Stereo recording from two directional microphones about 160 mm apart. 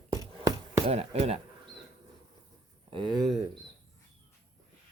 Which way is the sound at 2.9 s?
30° right (ahead or behind).